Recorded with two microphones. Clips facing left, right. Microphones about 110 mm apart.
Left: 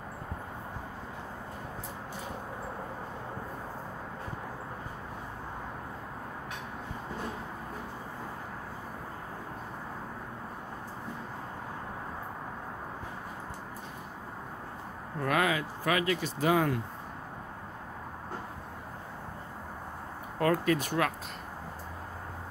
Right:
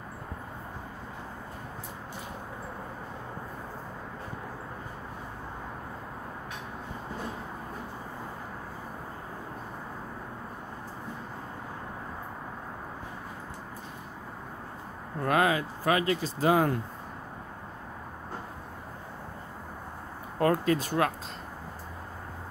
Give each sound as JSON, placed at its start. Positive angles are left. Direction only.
{"t": 15.2, "sound": "speech", "side_deg": -35}
{"t": 20.3, "sound": "speech", "side_deg": -30}